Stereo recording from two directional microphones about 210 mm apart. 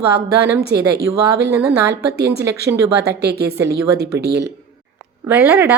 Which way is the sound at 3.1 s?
50° right (ahead or behind).